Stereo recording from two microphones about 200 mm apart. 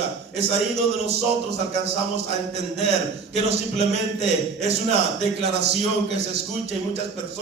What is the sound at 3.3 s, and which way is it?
A man's voice, 30° right (ahead or behind).